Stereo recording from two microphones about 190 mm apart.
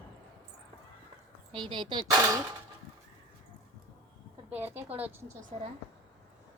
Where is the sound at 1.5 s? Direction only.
25° right (ahead or behind).